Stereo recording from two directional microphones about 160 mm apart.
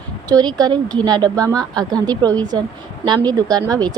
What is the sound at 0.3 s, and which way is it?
Speech, 25° right (ahead or behind).